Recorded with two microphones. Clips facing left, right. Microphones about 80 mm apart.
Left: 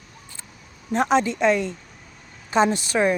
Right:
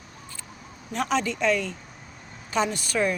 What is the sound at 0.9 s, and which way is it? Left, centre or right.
A woman's voice, left.